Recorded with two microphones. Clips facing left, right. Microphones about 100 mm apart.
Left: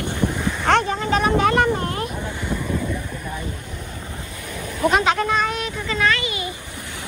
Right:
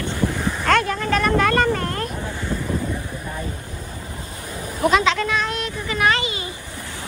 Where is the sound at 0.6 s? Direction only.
55° right (ahead or behind).